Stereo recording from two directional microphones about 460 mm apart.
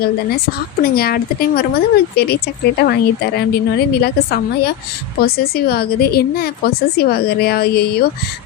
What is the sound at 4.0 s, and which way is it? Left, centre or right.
Speech, left.